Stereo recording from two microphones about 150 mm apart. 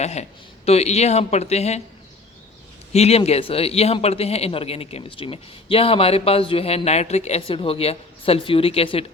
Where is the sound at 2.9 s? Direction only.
45° left (ahead or behind).